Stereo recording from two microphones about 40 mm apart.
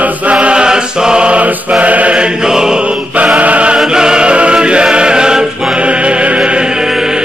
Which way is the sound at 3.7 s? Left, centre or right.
Centre.